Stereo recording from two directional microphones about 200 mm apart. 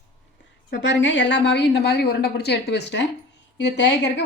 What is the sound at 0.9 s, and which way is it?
A woman's voice, 65° left (ahead or behind).